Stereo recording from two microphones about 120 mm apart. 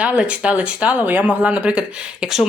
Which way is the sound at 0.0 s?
10° right (ahead or behind).